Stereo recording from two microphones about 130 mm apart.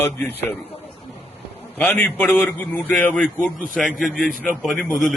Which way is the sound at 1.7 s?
15° left (ahead or behind).